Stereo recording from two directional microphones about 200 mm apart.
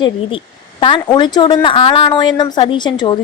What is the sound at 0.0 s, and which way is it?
A woman's voice, 25° left (ahead or behind).